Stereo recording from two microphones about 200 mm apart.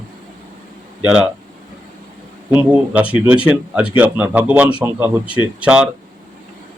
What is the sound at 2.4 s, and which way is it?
A man's voice, 10° right (ahead or behind).